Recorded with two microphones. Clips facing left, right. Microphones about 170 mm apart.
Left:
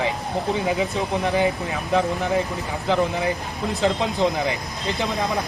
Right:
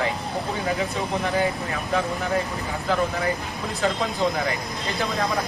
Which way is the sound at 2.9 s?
20° left (ahead or behind).